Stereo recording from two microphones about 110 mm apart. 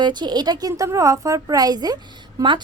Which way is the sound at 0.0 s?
40° right (ahead or behind).